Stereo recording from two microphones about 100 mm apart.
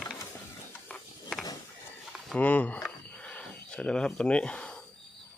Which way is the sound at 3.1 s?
10° left (ahead or behind).